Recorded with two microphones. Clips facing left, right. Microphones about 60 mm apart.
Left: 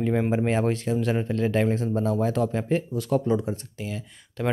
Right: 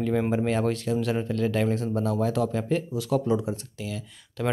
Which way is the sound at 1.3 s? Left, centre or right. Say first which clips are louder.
Left 2 dB; centre.